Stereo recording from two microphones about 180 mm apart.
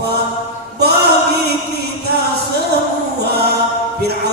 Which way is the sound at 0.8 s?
65° right (ahead or behind).